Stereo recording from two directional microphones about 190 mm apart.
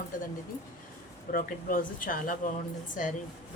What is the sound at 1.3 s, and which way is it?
Speech, 45° left (ahead or behind).